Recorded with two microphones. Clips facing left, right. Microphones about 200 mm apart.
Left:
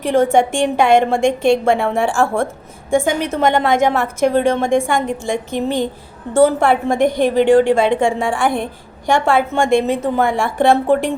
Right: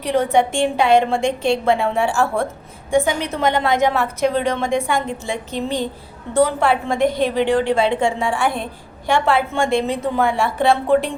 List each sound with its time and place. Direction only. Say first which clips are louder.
0.1 s a woman's voice: left 3 dB; 50° left (ahead or behind)